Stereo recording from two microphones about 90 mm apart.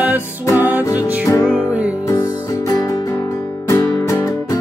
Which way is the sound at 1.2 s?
35° left (ahead or behind).